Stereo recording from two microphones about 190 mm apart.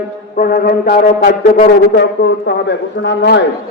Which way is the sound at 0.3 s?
50° left (ahead or behind).